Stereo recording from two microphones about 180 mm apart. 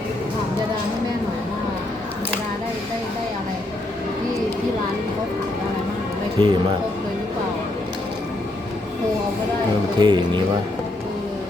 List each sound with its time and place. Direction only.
6.4 s speech: 30° right (ahead or behind)
10.0 s speech: 25° right (ahead or behind)